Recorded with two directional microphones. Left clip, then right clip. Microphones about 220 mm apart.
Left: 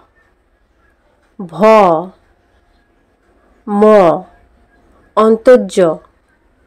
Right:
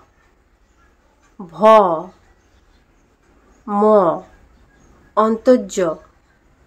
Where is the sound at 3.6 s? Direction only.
25° left (ahead or behind).